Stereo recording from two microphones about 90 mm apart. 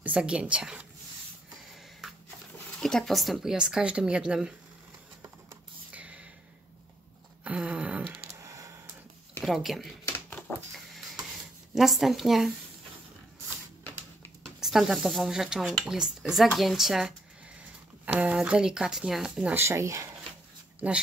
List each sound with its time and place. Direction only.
0.0 s speech: 15° right (ahead or behind)
2.8 s speech: 5° left (ahead or behind)
5.9 s a sound: 15° right (ahead or behind)
7.4 s a sound: 15° right (ahead or behind)
8.3 s a sound: 40° right (ahead or behind)
9.4 s speech: centre (ahead or behind)
11.7 s speech: centre (ahead or behind)
14.6 s speech: 5° right (ahead or behind)
18.0 s speech: 15° right (ahead or behind)
19.5 s speech: 30° right (ahead or behind)
20.8 s speech: 15° right (ahead or behind)